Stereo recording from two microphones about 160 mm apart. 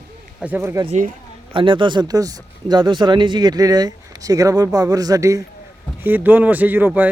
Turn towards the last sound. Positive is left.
turn(degrees=-10)  # may be behind; listen again after turning